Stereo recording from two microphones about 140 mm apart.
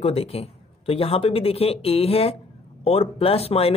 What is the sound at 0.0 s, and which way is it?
Speech, 45° left (ahead or behind).